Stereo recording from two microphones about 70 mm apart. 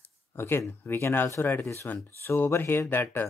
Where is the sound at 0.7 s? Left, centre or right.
Left.